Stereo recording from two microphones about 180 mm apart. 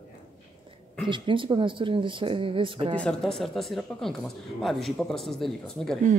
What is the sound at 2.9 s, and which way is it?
Speech, 5° left (ahead or behind).